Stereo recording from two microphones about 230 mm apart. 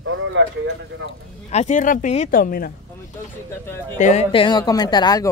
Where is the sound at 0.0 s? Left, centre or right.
Right.